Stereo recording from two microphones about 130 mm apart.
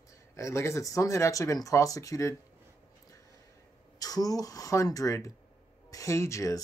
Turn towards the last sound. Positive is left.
turn(degrees=25)  # may be behind; listen again after turning